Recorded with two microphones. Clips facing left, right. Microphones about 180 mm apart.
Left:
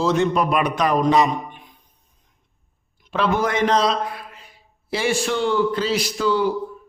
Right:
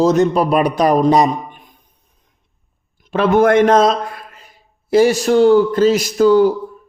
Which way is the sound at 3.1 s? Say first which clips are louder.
Right 9 dB; 50° right (ahead or behind).